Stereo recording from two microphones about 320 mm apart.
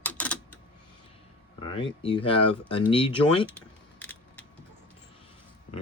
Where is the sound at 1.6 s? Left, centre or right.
Centre.